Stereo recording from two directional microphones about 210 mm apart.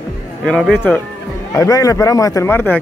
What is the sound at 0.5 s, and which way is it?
Speech, centre (ahead or behind).